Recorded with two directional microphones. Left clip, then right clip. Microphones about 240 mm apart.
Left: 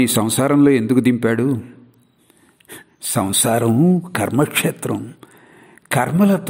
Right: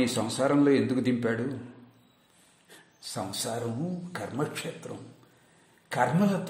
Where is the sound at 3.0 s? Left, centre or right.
Left.